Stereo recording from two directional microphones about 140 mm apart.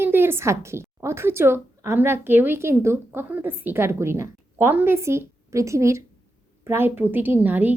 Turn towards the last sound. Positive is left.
turn(degrees=-10)  # may be behind; listen again after turning